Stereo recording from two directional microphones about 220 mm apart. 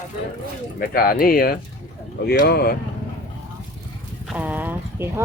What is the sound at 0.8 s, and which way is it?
Speech, 40° left (ahead or behind).